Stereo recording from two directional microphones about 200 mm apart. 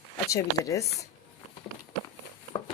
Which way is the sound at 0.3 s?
15° left (ahead or behind).